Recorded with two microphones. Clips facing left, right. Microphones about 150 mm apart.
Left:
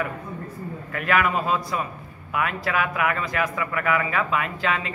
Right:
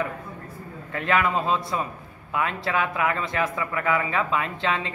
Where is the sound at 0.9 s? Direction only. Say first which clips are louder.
Even; 25° right (ahead or behind).